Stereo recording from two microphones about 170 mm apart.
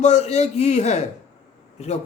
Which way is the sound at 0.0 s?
40° left (ahead or behind).